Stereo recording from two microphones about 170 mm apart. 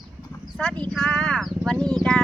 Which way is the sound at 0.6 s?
5° left (ahead or behind).